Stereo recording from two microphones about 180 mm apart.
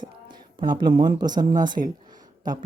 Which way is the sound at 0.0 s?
25° right (ahead or behind).